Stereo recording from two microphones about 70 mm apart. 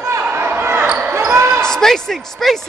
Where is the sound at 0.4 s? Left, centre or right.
Right.